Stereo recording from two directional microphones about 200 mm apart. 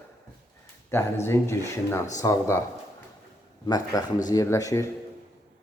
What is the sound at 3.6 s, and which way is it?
A man's voice, 20° left (ahead or behind).